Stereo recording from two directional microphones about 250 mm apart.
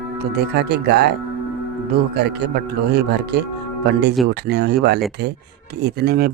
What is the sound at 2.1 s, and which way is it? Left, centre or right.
Speech, right.